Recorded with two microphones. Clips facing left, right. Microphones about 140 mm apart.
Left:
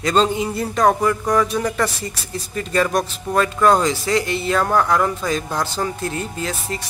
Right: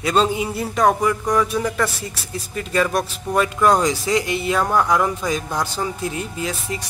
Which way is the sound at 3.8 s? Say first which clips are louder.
Even; 15° right (ahead or behind).